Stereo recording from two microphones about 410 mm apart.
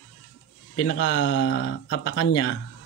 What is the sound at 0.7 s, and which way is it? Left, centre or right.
Speech, left.